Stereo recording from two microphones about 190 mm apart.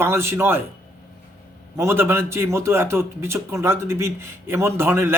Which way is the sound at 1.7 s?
10° right (ahead or behind).